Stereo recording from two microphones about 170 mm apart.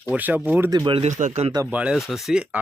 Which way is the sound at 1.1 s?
45° right (ahead or behind).